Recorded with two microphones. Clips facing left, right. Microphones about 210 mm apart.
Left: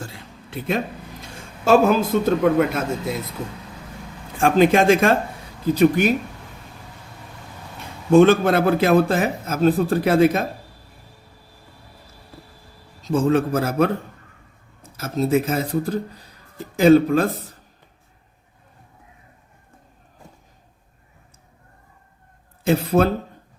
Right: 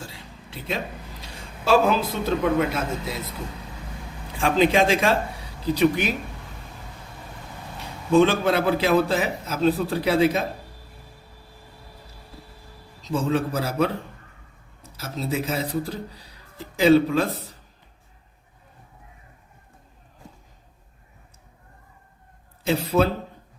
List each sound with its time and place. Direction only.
0.0 s a sound: 55° left (ahead or behind)
1.6 s speech: 50° left (ahead or behind)
4.4 s speech: 50° left (ahead or behind)
8.1 s speech: 55° left (ahead or behind)
13.0 s speech: 50° left (ahead or behind)
14.9 s speech: 50° left (ahead or behind)
22.6 s speech: 50° left (ahead or behind)